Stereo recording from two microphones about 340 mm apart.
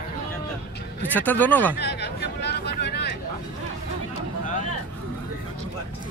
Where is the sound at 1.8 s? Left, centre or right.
Left.